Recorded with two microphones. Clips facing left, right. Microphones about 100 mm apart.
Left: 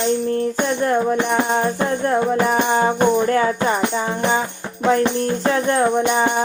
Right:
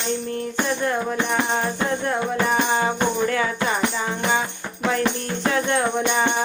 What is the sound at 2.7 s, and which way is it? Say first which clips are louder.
Music: left 5 dB; 35° left (ahead or behind).